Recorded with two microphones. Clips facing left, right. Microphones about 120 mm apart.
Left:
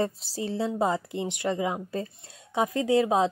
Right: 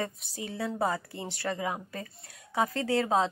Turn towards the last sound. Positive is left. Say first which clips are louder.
# left 4 dB
turn(degrees=20)  # may be behind; listen again after turning